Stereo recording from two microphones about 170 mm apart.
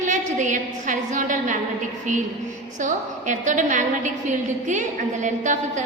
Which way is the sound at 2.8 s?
45° right (ahead or behind).